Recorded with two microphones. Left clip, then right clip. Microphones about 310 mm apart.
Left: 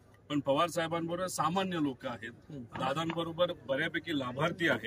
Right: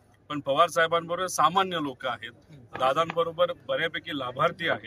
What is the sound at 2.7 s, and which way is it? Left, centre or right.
Speech, centre.